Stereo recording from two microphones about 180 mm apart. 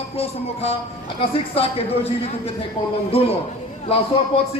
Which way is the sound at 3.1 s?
30° left (ahead or behind).